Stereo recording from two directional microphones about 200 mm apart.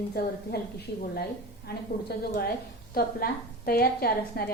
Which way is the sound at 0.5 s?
50° left (ahead or behind).